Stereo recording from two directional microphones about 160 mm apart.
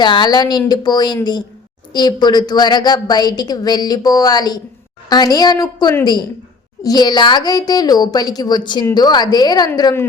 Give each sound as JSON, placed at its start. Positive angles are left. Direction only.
{"t": 0.0, "sound": "a woman's voice", "side_deg": 30}